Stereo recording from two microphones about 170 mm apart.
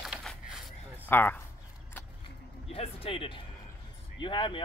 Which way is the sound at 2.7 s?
35° left (ahead or behind).